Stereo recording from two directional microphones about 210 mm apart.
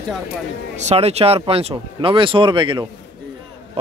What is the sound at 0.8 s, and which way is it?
Speech, 30° right (ahead or behind).